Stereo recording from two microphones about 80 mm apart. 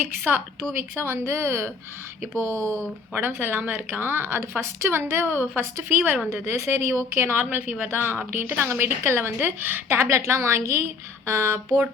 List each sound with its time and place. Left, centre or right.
0.0 s a woman's voice: right